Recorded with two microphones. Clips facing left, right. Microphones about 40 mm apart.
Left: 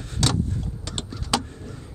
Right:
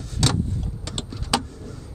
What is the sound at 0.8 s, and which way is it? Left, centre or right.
Vehicle, centre.